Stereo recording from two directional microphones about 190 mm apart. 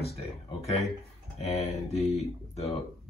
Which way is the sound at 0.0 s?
35° left (ahead or behind).